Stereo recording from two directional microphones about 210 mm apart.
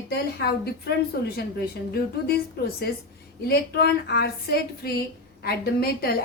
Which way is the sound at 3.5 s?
50° left (ahead or behind).